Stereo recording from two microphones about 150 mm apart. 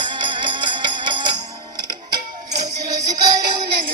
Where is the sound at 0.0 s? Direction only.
30° right (ahead or behind).